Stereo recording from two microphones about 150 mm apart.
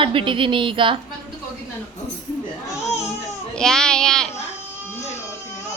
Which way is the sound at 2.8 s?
45° left (ahead or behind).